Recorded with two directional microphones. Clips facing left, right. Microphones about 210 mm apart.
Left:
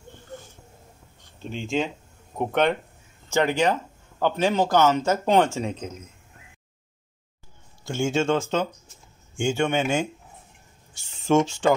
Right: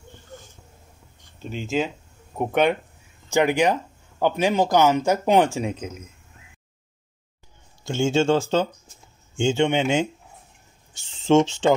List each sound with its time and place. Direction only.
1.4 s speech: 5° right (ahead or behind)
7.8 s speech: 25° right (ahead or behind)
9.4 s speech: 20° right (ahead or behind)